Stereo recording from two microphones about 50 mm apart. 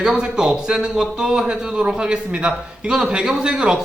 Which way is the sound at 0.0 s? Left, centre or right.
Centre.